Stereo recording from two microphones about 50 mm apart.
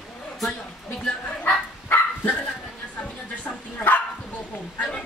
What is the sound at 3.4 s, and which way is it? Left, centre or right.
Bow-wow, left.